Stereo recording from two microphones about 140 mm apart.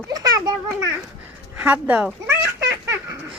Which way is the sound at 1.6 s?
10° right (ahead or behind).